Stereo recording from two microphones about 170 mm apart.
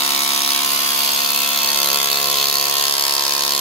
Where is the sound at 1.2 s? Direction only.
30° left (ahead or behind).